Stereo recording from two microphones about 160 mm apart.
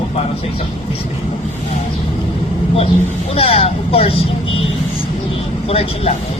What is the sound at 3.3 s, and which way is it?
Speech, 35° left (ahead or behind).